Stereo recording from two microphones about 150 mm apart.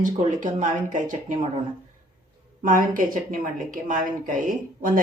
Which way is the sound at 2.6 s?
65° right (ahead or behind).